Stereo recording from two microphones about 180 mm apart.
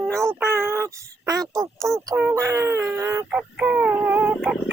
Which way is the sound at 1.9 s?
20° right (ahead or behind).